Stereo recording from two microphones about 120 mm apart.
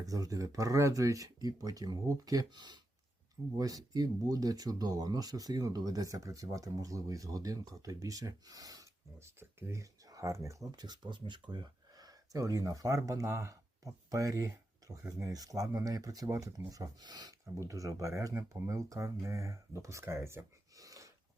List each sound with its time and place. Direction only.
0.0 s speech: 30° right (ahead or behind)